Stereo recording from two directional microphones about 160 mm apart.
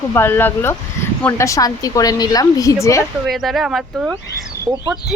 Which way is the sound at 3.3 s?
Centre (ahead or behind).